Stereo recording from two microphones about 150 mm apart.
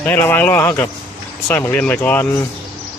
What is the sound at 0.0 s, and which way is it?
Speech, 15° left (ahead or behind).